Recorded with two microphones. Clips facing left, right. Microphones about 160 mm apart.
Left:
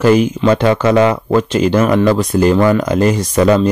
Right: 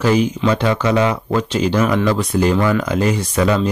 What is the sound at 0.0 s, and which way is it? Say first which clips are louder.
Speech: left 5 dB; 50° left (ahead or behind).